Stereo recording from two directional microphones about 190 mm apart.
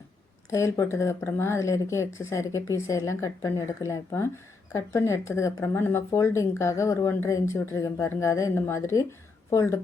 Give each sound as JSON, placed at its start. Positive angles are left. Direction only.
{"t": 0.5, "sound": "speech", "side_deg": 15}